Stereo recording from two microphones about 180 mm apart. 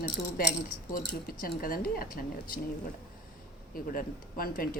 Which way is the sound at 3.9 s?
55° left (ahead or behind).